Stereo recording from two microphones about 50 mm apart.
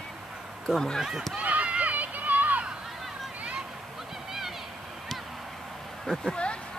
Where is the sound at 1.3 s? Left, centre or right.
Right.